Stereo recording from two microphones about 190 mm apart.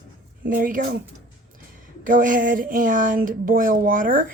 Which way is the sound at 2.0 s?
45° right (ahead or behind).